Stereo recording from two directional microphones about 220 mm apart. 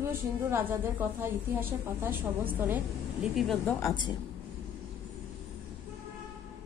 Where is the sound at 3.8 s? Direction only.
20° left (ahead or behind).